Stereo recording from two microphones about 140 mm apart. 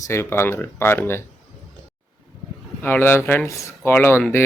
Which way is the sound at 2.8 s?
15° left (ahead or behind).